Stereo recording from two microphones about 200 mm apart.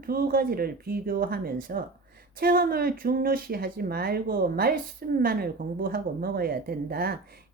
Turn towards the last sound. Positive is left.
turn(degrees=-50)  # may be behind; listen again after turning